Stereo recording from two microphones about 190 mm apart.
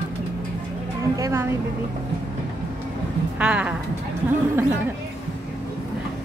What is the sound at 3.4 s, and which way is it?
Speech, 5° right (ahead or behind).